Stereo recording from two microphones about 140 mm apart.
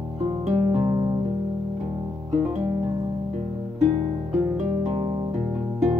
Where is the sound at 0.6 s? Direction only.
45° right (ahead or behind).